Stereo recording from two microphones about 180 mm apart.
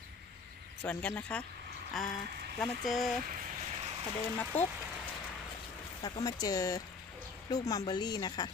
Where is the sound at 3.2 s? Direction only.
50° right (ahead or behind).